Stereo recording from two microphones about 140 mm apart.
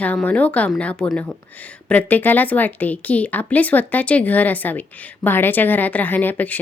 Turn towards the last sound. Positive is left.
turn(degrees=10)  # may be behind; listen again after turning